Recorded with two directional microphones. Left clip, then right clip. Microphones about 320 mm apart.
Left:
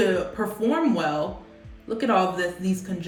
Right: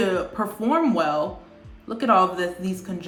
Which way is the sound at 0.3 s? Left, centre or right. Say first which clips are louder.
Right 2 dB; centre.